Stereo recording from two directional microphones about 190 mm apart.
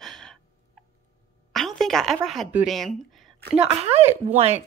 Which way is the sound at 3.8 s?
35° right (ahead or behind).